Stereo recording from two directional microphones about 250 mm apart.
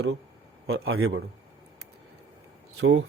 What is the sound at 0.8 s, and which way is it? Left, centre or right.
Speech, right.